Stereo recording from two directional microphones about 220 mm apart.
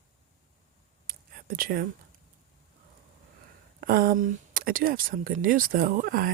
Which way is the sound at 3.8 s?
40° right (ahead or behind).